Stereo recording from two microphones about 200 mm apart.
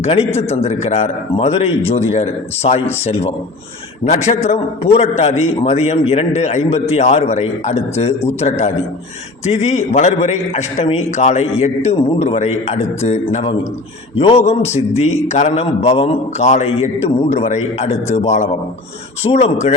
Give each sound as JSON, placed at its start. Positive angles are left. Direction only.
{"t": 0.0, "sound": "a man's voice", "side_deg": 30}